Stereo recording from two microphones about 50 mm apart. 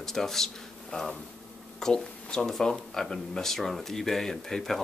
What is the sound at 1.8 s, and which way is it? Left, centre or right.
Speech, centre.